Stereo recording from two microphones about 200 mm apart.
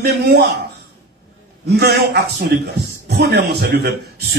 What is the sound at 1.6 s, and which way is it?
A man's voice, 55° right (ahead or behind).